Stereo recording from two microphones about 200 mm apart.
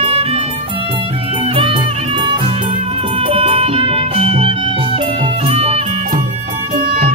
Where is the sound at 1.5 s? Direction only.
30° right (ahead or behind).